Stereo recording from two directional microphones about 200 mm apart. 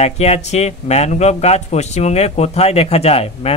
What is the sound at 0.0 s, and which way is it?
Speech, 30° left (ahead or behind).